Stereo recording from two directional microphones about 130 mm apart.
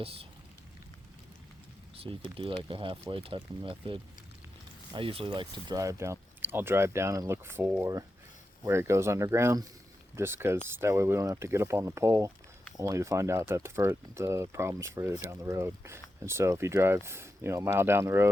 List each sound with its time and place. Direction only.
0.0 s speech: 45° right (ahead or behind)
2.3 s speech: 45° right (ahead or behind); by 18.3 s 20° right (ahead or behind)